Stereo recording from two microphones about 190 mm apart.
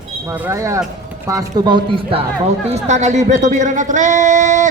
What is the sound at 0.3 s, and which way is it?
Speech, 10° right (ahead or behind).